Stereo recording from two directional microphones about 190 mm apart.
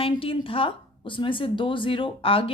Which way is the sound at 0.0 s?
30° left (ahead or behind).